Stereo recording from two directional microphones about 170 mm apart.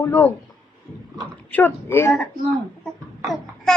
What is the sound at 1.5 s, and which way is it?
Speech, 10° left (ahead or behind).